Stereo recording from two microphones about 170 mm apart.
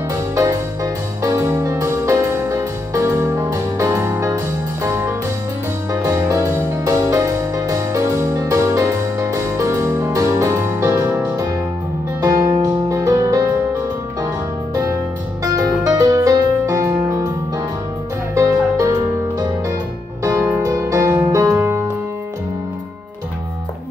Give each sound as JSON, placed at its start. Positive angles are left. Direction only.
{"t": 0.1, "sound": "music", "side_deg": -20}
{"t": 12.9, "sound": "music", "side_deg": -20}
{"t": 15.4, "sound": "music", "side_deg": -20}
{"t": 18.3, "sound": "music", "side_deg": -20}
{"t": 20.2, "sound": "music", "side_deg": -15}